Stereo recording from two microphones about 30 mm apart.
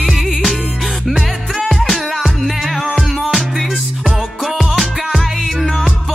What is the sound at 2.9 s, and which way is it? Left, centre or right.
Music, centre.